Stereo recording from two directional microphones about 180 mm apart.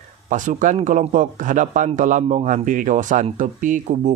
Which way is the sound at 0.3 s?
45° right (ahead or behind).